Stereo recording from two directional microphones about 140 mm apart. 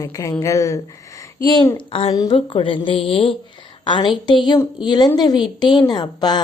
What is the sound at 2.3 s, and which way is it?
A woman's voice, 40° left (ahead or behind).